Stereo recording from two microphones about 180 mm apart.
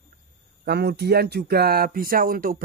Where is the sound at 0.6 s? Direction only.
65° right (ahead or behind).